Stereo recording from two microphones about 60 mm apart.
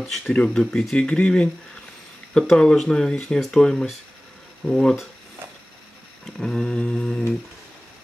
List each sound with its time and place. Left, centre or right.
0.0 s speech: centre
2.5 s speech: centre
6.4 s speech: centre